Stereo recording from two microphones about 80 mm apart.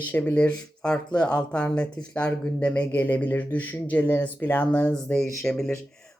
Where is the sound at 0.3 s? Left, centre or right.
Centre.